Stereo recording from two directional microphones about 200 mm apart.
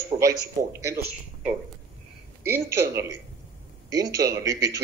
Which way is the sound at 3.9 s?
20° right (ahead or behind).